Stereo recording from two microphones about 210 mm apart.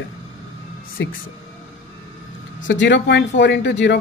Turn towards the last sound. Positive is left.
turn(degrees=55)  # may be behind; listen again after turning